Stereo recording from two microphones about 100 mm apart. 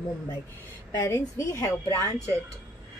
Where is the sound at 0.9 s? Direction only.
35° left (ahead or behind).